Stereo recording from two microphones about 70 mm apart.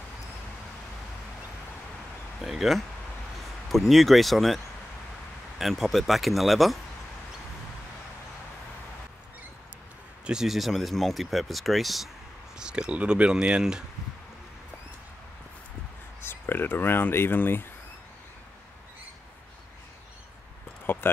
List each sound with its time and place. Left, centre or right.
2.4 s speech: centre
5.6 s speech: centre
10.2 s speech: centre
12.5 s speech: centre
16.2 s speech: left
20.8 s a sound: left